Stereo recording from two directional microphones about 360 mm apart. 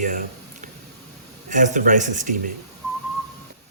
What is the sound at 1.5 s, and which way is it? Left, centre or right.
Mechanisms, right.